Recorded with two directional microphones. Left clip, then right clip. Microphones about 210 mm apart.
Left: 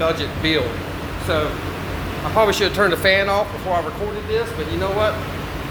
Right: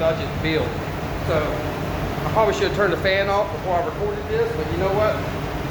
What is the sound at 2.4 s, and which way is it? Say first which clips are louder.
Speech: left 3 dB; 45° left (ahead or behind).